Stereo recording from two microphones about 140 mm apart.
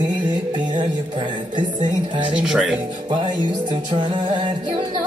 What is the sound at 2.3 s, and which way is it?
Speech, 5° right (ahead or behind).